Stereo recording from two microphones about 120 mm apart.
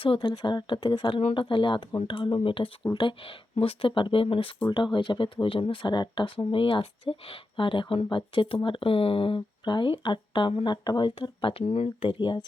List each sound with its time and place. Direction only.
0.0 s speech: 45° left (ahead or behind)